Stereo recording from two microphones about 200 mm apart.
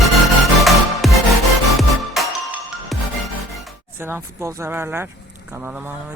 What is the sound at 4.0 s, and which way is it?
Speech, 10° right (ahead or behind).